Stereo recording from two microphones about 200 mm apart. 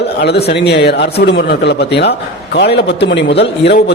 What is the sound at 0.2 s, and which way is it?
A man's voice, 55° left (ahead or behind).